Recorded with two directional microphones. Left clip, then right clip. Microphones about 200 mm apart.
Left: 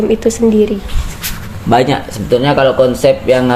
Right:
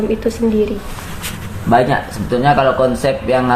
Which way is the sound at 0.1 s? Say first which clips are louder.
Left 5 dB; 40° left (ahead or behind).